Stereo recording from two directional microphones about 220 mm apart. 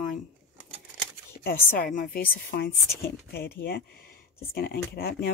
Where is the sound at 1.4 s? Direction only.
40° left (ahead or behind).